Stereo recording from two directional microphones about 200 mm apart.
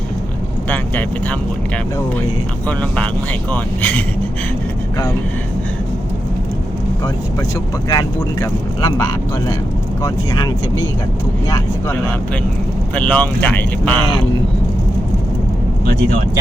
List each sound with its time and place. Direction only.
0.7 s speech: 10° left (ahead or behind)
2.6 s speech: 5° left (ahead or behind)
7.9 s speech: 15° left (ahead or behind)